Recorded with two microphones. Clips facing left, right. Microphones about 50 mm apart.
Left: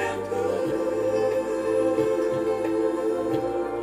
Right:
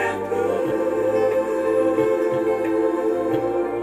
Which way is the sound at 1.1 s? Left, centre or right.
Right.